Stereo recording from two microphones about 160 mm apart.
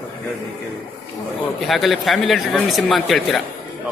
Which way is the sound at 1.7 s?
Centre (ahead or behind).